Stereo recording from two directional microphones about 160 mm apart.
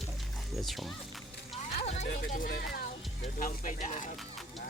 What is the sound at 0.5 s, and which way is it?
Speech, centre (ahead or behind).